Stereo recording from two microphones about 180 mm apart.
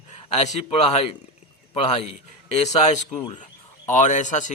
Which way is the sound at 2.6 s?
40° left (ahead or behind).